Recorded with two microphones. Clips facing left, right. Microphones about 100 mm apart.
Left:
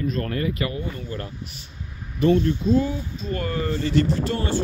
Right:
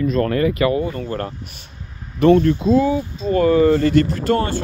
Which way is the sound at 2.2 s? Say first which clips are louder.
Right 6 dB; 85° right.